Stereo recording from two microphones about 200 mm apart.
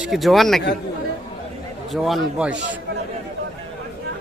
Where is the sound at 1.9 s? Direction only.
Centre (ahead or behind).